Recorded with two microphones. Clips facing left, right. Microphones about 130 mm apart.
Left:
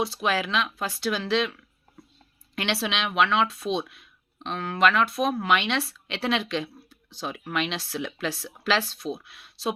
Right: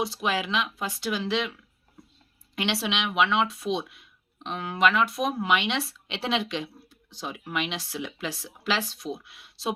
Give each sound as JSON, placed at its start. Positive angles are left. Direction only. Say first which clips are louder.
{"t": 0.0, "sound": "speech", "louder": "left 2 dB", "side_deg": -15}
{"t": 2.6, "sound": "speech", "louder": "even", "side_deg": -15}